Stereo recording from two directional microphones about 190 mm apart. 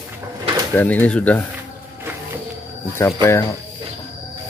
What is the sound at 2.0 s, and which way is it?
Music, 10° right (ahead or behind).